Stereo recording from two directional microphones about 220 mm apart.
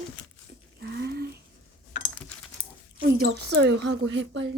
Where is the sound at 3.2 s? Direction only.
50° right (ahead or behind).